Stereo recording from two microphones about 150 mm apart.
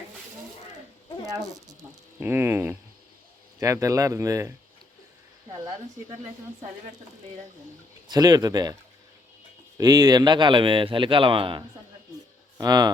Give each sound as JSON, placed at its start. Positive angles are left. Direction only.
{"t": 1.5, "sound": "speech", "side_deg": -25}
{"t": 8.0, "sound": "speech", "side_deg": -25}
{"t": 9.7, "sound": "a man's voice", "side_deg": -25}